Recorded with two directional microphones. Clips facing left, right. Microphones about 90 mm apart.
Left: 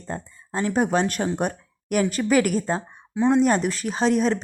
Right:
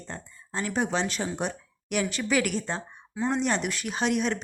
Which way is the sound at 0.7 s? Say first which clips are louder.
Left 6 dB; 45° left (ahead or behind).